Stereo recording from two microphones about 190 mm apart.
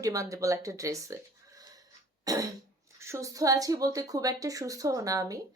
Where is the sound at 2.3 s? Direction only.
15° right (ahead or behind).